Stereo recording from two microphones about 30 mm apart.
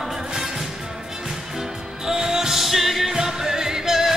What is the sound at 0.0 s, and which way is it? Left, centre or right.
Music, centre.